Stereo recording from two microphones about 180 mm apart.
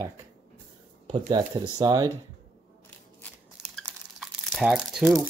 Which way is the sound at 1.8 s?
20° right (ahead or behind).